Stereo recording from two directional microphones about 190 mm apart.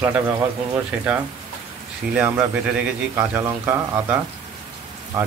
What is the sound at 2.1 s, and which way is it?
A man's voice, 5° right (ahead or behind).